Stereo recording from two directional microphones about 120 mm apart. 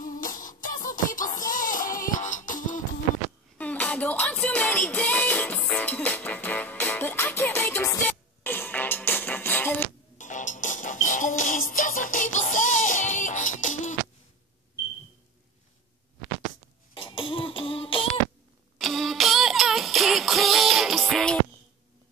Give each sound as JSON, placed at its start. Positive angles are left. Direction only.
{"t": 0.0, "sound": "music", "side_deg": 90}
{"t": 3.5, "sound": "music", "side_deg": 10}
{"t": 10.1, "sound": "music", "side_deg": 90}
{"t": 16.9, "sound": "a sound", "side_deg": 45}
{"t": 18.8, "sound": "music", "side_deg": 0}